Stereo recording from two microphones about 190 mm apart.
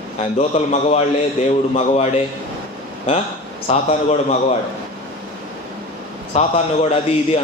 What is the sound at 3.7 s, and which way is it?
Speech, 35° left (ahead or behind).